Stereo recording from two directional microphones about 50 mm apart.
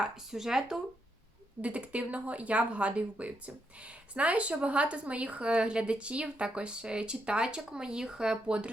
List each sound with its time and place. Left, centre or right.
0.0 s speech: centre
1.6 s speech: right